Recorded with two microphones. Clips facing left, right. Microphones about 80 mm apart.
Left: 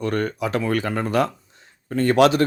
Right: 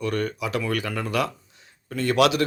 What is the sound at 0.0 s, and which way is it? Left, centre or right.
Speech, left.